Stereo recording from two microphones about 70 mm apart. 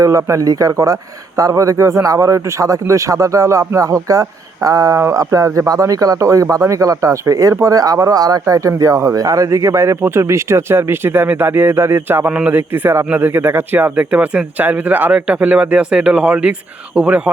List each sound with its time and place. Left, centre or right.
0.0 s speech: right; by 17.2 s centre